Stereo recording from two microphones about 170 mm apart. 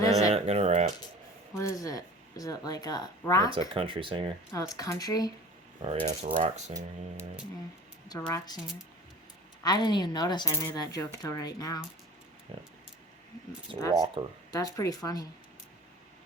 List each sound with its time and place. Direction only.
0.0 s a sound: 20° left (ahead or behind)
0.3 s coin: 35° right (ahead or behind)
1.5 s a woman's voice: 20° left (ahead or behind)
3.8 s speech: 30° right (ahead or behind)
4.7 s a woman's voice: 20° left (ahead or behind)
5.8 s coin: 35° right (ahead or behind)
8.0 s a woman's voice: 20° left (ahead or behind)
9.6 s a woman's voice: 25° left (ahead or behind)
13.7 s coin: 30° right (ahead or behind)
14.5 s a woman's voice: 20° left (ahead or behind)